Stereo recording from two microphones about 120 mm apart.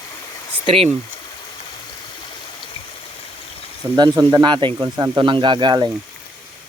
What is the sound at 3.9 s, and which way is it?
Speech, 35° right (ahead or behind).